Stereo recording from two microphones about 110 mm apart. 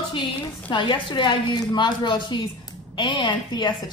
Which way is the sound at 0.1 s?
45° left (ahead or behind).